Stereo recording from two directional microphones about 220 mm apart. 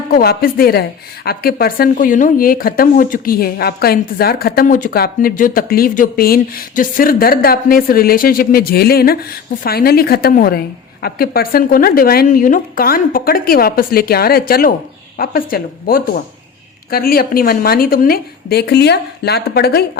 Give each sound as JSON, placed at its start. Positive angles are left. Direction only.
{"t": 0.1, "sound": "a woman's voice", "side_deg": 40}